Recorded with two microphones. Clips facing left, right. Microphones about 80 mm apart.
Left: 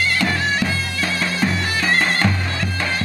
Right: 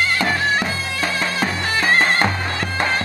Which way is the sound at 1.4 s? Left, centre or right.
Right.